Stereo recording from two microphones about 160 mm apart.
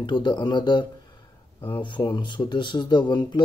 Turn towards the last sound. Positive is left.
turn(degrees=30)  # may be behind; listen again after turning